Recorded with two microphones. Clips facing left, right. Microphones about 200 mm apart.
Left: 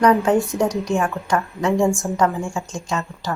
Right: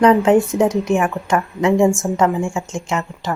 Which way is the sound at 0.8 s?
15° right (ahead or behind).